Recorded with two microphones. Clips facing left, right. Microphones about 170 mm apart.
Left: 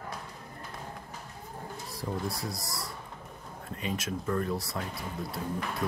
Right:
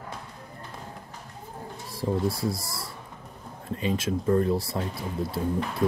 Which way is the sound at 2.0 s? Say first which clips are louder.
Right 8 dB; 25° right (ahead or behind).